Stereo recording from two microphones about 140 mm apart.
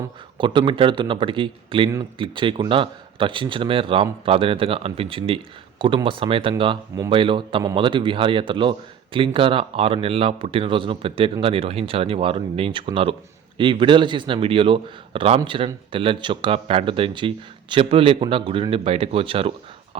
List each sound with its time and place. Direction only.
0.3 s speech: 35° right (ahead or behind)